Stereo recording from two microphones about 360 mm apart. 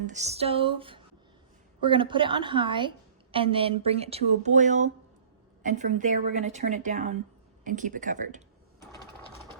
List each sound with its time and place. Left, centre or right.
0.1 s speech: centre